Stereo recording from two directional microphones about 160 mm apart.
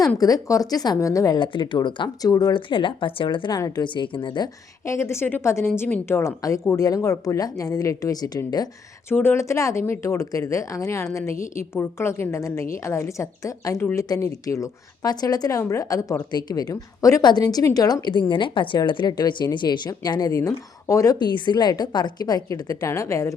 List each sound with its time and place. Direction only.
0.2 s speech: 25° left (ahead or behind)
4.9 s a woman's voice: 15° left (ahead or behind)